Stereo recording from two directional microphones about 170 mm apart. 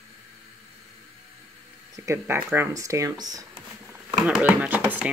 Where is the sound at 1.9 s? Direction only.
15° right (ahead or behind).